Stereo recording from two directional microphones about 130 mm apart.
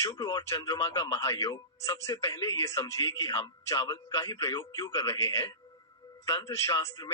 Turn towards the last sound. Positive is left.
turn(degrees=20)  # may be behind; listen again after turning